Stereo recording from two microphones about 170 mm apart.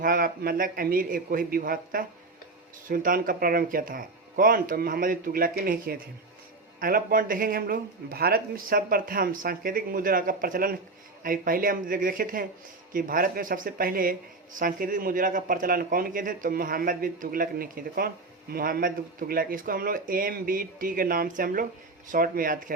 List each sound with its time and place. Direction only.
0.0 s speech: 55° right (ahead or behind)